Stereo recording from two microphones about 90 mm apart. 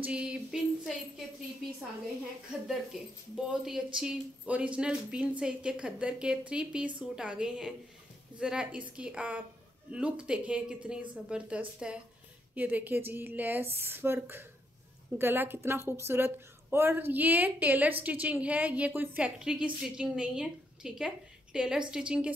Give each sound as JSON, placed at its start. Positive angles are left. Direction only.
{"t": 0.0, "sound": "speech", "side_deg": -10}
{"t": 2.7, "sound": "a woman's voice", "side_deg": -5}